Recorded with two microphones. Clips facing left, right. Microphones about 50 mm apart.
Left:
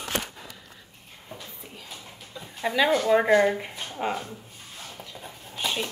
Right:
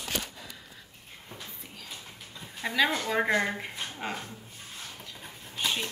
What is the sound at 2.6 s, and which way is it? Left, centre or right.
Speech, centre.